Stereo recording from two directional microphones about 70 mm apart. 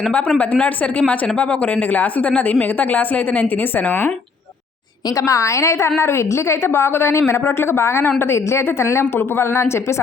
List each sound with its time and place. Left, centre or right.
0.3 s speech: left
5.1 s a woman's voice: left